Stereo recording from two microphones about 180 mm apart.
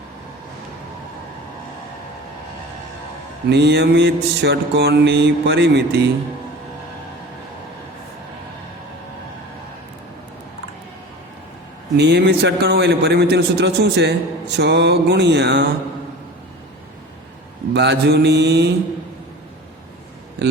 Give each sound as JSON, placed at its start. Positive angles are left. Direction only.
{"t": 3.5, "sound": "a man's voice", "side_deg": -70}
{"t": 11.9, "sound": "a man's voice", "side_deg": -65}
{"t": 17.7, "sound": "mantra", "side_deg": -70}
{"t": 20.4, "sound": "speech", "side_deg": -70}